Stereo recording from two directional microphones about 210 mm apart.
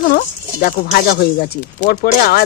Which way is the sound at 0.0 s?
45° left (ahead or behind).